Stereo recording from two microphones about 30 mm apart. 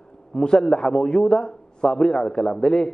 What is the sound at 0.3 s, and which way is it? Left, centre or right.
A man's voice, left.